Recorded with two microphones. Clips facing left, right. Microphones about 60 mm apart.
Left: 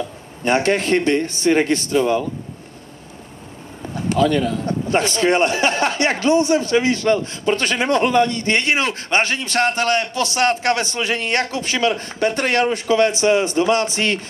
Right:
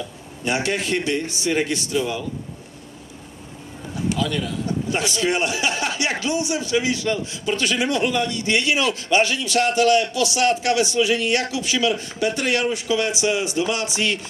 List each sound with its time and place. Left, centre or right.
0.4 s a man's voice: left
3.9 s a man's voice: left